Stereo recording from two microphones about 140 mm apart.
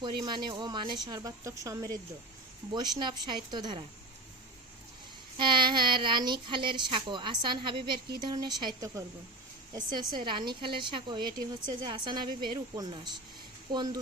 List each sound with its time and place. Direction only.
0.0 s speech: 30° right (ahead or behind)
5.4 s speech: 35° right (ahead or behind)